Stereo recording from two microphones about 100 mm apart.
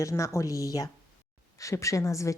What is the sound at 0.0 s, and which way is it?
Speech, 30° left (ahead or behind).